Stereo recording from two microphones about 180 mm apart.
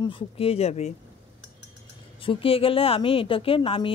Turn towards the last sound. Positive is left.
turn(degrees=30)  # may be behind; listen again after turning